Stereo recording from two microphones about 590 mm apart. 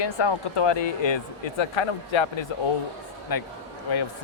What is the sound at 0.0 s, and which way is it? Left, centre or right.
Speech, left.